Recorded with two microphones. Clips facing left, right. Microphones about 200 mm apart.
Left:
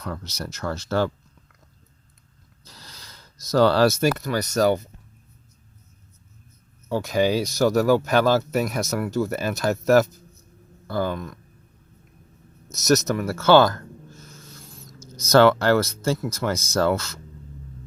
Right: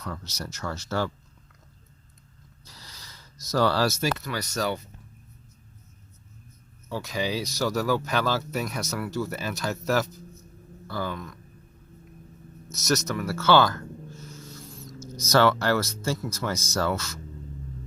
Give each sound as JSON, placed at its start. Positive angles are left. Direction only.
{"t": 0.0, "sound": "speech", "side_deg": 55}
{"t": 2.7, "sound": "speech", "side_deg": 55}
{"t": 6.9, "sound": "speech", "side_deg": 50}
{"t": 12.8, "sound": "speech", "side_deg": 45}
{"t": 14.9, "sound": "speech", "side_deg": 55}